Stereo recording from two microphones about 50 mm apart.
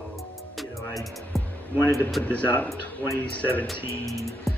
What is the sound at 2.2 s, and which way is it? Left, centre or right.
A man's voice, left.